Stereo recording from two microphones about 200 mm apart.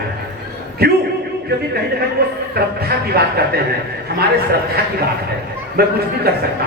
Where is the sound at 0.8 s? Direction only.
50° right (ahead or behind).